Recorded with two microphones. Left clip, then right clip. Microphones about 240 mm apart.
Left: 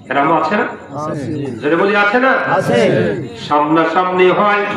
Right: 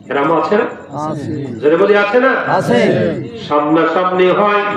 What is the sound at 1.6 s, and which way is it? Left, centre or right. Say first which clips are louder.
Speech: right 2 dB; left.